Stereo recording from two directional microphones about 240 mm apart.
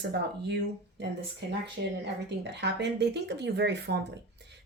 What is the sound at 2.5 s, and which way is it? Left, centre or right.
Speech, right.